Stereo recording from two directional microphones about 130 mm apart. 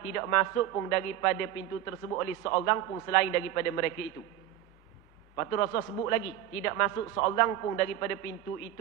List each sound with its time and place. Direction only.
0.1 s a man's voice: 25° left (ahead or behind)
5.3 s a man's voice: 20° left (ahead or behind)